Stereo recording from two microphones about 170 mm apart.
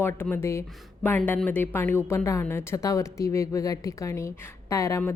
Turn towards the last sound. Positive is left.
turn(degrees=15)  # may be behind; listen again after turning